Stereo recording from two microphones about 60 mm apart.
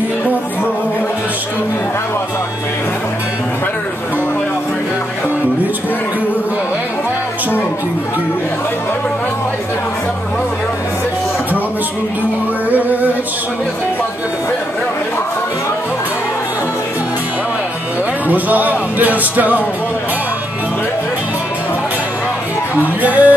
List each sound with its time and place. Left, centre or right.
12.7 s music: right
18.3 s music: right
23.0 s music: right